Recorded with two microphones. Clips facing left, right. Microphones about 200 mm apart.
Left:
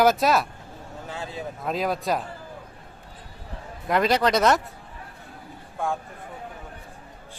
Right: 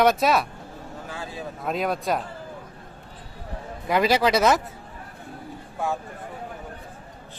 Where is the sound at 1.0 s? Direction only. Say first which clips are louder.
Left 2 dB; 25° left (ahead or behind).